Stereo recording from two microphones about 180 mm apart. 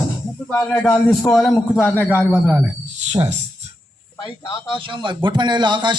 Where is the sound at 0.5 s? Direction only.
10° left (ahead or behind).